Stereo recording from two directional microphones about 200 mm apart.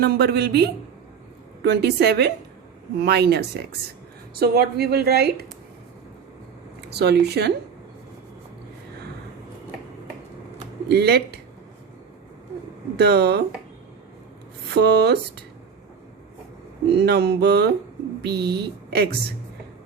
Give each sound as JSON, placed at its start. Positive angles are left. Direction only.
{"t": 0.0, "sound": "a woman's voice", "side_deg": -55}
{"t": 6.8, "sound": "speech", "side_deg": -55}
{"t": 10.8, "sound": "speech", "side_deg": -55}
{"t": 13.0, "sound": "speech", "side_deg": -55}
{"t": 14.7, "sound": "speech", "side_deg": -55}
{"t": 16.9, "sound": "speech", "side_deg": -55}